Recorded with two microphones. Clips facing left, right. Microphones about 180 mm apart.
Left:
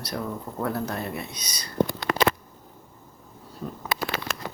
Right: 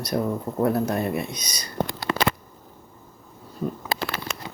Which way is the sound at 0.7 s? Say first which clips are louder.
Right 5 dB; 20° right (ahead or behind).